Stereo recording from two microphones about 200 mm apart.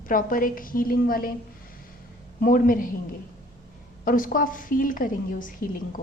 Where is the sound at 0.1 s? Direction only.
45° left (ahead or behind).